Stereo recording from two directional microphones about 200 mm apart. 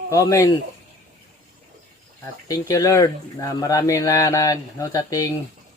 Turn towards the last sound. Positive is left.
turn(degrees=15)  # may be behind; listen again after turning